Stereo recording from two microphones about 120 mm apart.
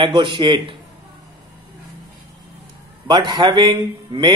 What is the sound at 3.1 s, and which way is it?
A man's voice, 40° right (ahead or behind).